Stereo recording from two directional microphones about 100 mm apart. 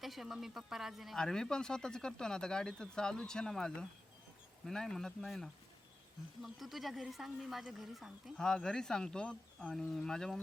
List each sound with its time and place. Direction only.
0.0 s speech: centre (ahead or behind)